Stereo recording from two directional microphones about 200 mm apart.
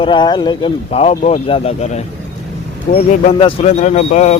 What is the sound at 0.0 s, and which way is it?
Speech, 25° left (ahead or behind).